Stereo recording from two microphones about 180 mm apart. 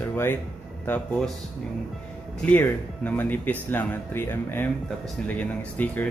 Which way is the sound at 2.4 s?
10° left (ahead or behind).